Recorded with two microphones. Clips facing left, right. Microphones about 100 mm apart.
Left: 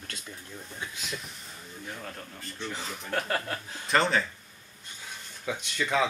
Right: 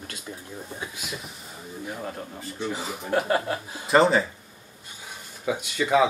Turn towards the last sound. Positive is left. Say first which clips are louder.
# right 6 dB
turn(degrees=-10)  # may be behind; listen again after turning